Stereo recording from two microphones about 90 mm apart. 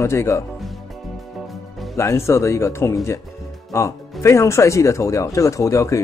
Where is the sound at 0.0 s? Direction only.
30° left (ahead or behind).